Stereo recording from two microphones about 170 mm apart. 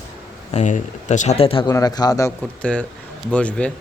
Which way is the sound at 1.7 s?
20° left (ahead or behind).